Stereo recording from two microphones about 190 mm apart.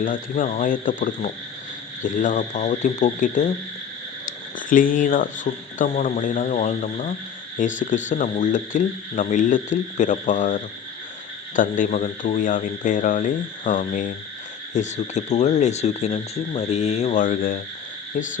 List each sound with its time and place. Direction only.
0.0 s speech: 45° left (ahead or behind)
4.7 s speech: 45° left (ahead or behind)